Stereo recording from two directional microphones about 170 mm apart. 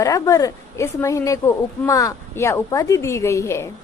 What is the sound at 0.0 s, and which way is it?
A woman's voice, 20° left (ahead or behind).